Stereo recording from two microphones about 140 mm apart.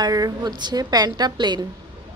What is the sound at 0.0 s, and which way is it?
A woman's voice, 30° right (ahead or behind).